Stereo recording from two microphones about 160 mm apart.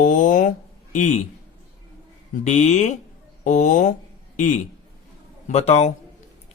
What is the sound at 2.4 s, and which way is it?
A man's voice, 45° left (ahead or behind).